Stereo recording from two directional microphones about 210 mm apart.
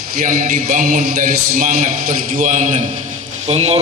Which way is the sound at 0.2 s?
40° right (ahead or behind).